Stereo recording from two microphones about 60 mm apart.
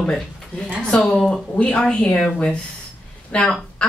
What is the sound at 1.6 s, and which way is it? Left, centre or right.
A woman's voice, centre.